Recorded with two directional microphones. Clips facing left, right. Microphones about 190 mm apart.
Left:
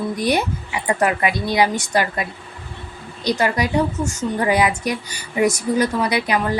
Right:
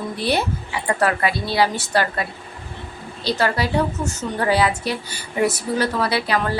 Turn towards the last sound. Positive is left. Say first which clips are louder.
# left 1 dB
turn(degrees=15)  # may be behind; listen again after turning